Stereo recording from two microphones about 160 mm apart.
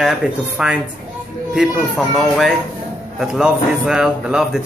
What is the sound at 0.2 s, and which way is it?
Speech, 5° right (ahead or behind).